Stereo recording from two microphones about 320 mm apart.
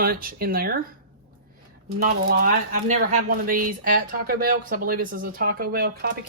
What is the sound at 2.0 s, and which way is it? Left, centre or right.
Speech, right.